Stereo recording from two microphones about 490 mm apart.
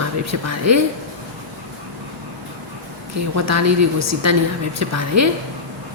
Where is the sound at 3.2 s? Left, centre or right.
Right.